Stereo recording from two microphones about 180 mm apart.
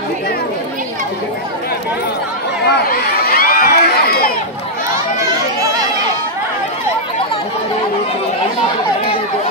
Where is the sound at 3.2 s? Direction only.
50° left (ahead or behind).